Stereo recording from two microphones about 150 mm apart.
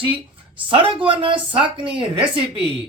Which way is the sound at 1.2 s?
35° right (ahead or behind).